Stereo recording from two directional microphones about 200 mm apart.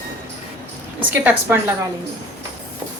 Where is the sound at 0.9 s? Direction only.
10° right (ahead or behind).